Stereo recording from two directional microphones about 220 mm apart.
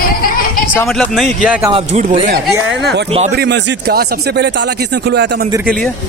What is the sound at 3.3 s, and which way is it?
Speech, 50° right (ahead or behind).